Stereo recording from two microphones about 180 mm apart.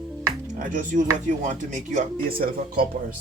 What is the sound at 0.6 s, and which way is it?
Speech, 45° right (ahead or behind).